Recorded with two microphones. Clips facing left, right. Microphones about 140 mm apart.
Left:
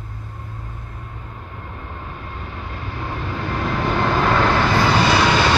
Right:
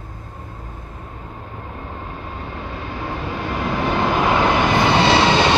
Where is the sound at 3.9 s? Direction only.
15° right (ahead or behind).